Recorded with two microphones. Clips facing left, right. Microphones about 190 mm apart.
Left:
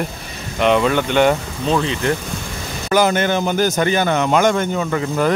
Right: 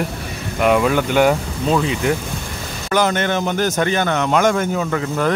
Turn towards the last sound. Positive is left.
turn(degrees=5)  # may be behind; listen again after turning